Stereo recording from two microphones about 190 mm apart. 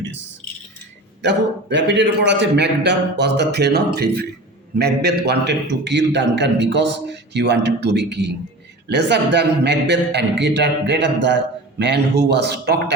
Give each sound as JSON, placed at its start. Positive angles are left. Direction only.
{"t": 1.2, "sound": "a man's voice", "side_deg": -65}